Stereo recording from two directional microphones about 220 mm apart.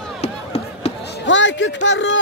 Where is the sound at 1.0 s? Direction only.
50° left (ahead or behind).